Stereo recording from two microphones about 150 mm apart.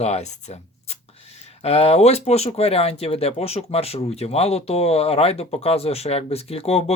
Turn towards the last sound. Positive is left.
turn(degrees=40)  # may be behind; listen again after turning